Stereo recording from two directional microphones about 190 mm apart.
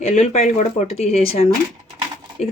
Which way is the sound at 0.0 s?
35° left (ahead or behind).